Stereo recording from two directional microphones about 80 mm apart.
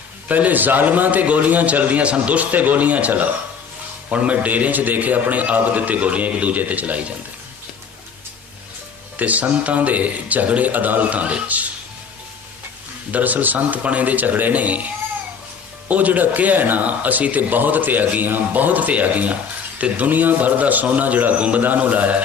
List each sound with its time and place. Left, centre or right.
0.3 s speech: centre
9.1 s speech: centre
13.1 s speech: centre
15.9 s speech: centre